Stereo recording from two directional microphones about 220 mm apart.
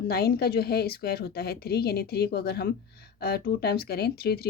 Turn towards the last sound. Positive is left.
turn(degrees=45)  # may be behind; listen again after turning